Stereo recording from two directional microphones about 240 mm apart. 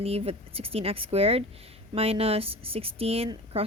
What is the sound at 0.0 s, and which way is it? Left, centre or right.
Speech, right.